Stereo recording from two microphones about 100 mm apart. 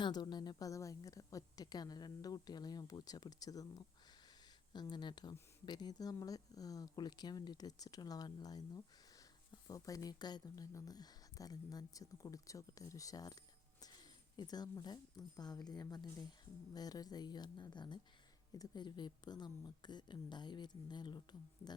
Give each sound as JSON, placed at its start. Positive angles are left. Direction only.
{"t": 0.0, "sound": "a woman's voice", "side_deg": 45}